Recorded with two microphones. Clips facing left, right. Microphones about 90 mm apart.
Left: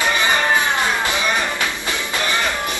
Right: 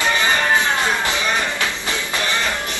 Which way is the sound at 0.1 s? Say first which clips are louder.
Right 1 dB; 20° left (ahead or behind).